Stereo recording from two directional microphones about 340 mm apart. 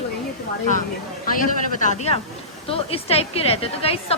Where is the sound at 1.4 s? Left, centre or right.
Left.